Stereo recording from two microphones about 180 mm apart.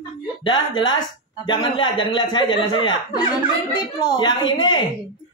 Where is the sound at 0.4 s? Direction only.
25° left (ahead or behind).